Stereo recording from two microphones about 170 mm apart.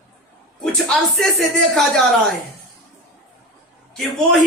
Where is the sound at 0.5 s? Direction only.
Centre (ahead or behind).